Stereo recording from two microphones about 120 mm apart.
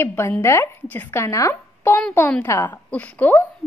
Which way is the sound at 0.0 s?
20° left (ahead or behind).